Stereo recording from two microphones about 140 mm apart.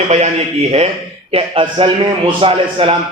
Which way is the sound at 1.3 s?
40° right (ahead or behind).